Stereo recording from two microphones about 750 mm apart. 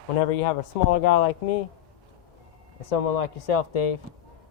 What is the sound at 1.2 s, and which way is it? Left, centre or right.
Speech, left.